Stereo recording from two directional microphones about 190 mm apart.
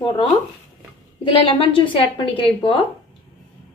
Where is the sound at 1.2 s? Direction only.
25° left (ahead or behind).